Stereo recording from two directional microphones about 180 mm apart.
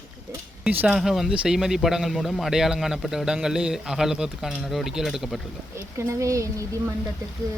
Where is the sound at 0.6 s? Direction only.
5° right (ahead or behind).